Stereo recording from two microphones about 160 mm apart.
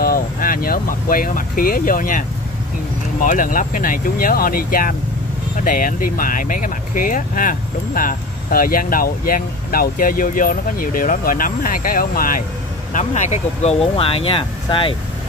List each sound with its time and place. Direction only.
0.0 s speech: 65° left (ahead or behind)
12.9 s speech: 45° left (ahead or behind)